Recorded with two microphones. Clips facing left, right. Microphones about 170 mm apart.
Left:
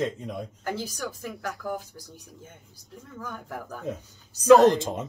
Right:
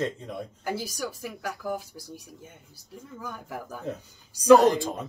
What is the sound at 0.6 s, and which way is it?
Speech, 10° right (ahead or behind).